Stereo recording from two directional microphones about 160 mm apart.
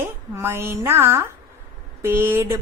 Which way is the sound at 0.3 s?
15° right (ahead or behind).